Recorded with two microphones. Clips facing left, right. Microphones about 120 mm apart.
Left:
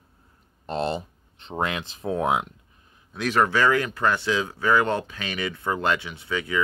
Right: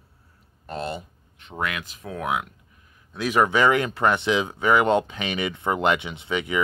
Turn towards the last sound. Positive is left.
turn(degrees=-20)  # may be behind; listen again after turning